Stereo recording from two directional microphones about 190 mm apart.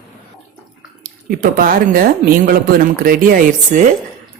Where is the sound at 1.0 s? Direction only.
50° right (ahead or behind).